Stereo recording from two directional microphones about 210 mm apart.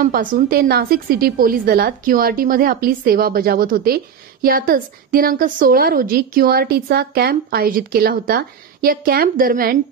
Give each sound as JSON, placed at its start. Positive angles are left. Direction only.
{"t": 0.0, "sound": "a woman's voice", "side_deg": -40}